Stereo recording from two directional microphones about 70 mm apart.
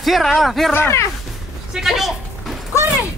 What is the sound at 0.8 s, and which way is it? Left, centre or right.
Speech, left.